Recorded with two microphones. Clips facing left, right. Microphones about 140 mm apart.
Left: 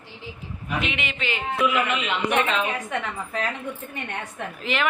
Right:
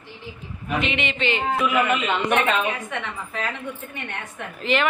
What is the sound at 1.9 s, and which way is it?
Speech, 50° right (ahead or behind).